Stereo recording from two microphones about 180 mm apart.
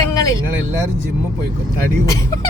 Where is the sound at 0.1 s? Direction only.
20° left (ahead or behind).